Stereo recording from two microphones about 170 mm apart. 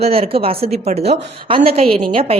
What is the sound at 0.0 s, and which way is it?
A woman's voice, 35° right (ahead or behind).